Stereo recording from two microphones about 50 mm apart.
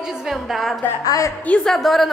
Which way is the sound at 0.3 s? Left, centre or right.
Centre.